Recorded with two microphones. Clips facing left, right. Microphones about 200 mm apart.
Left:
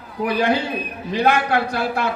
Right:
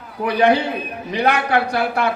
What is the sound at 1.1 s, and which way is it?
Speech, 65° right (ahead or behind).